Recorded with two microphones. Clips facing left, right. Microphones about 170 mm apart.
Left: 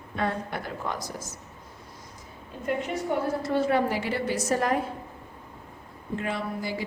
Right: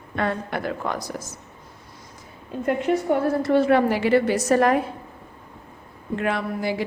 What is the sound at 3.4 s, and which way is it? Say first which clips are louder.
A woman's voice: right 7 dB; 70° right (ahead or behind).